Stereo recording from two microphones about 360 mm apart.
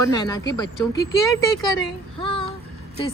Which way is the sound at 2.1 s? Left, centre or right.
Centre.